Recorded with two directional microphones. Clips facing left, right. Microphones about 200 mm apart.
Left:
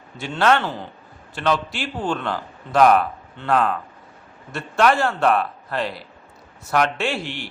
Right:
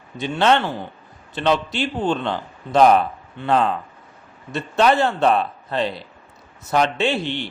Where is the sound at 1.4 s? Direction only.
20° right (ahead or behind).